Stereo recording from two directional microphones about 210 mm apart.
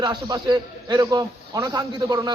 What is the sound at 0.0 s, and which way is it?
A man's voice, 20° right (ahead or behind).